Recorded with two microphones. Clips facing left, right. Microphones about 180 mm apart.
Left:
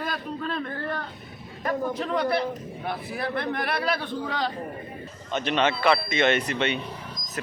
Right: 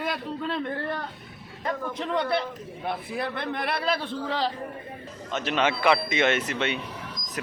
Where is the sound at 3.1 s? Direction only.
25° right (ahead or behind).